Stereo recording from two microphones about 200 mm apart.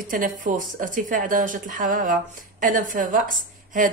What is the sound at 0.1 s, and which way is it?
Speech, 40° right (ahead or behind).